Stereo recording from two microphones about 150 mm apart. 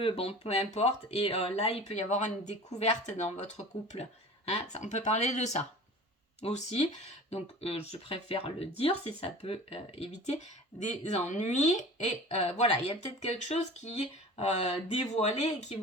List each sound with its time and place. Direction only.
0.0 s speech: 40° left (ahead or behind)